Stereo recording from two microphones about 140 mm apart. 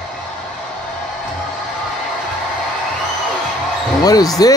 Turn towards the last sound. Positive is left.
turn(degrees=25)  # may be behind; listen again after turning